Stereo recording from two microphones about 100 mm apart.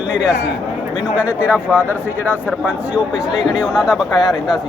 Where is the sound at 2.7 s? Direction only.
10° right (ahead or behind).